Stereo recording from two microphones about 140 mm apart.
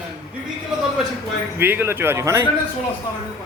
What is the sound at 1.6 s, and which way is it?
Speech, 15° right (ahead or behind).